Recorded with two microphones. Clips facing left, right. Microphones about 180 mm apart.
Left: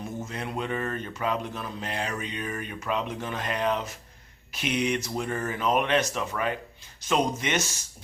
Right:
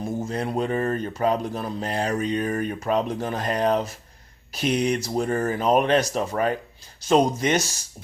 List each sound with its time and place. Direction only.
0.0 s speech: 35° right (ahead or behind)